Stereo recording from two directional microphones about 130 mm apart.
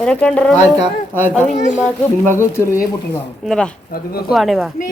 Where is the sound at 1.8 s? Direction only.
20° left (ahead or behind).